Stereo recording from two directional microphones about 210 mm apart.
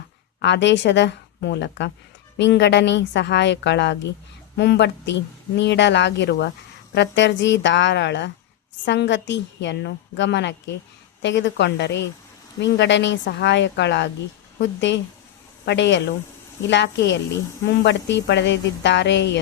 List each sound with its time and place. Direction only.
0.4 s a woman's voice: 55° left (ahead or behind)